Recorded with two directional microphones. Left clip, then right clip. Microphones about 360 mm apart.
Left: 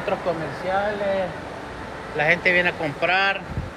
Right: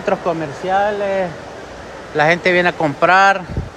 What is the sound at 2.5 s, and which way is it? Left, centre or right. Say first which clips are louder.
Speech: right 6 dB; right.